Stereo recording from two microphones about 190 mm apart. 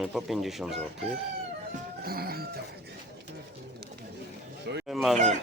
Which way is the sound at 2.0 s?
55° right (ahead or behind).